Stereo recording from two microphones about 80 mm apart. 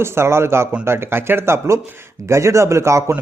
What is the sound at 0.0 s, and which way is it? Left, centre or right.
Speech, right.